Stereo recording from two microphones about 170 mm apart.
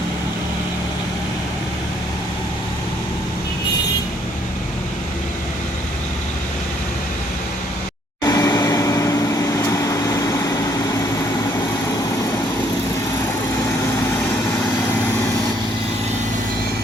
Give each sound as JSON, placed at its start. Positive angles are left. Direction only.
{"t": 8.2, "sound": "vehicle", "side_deg": 20}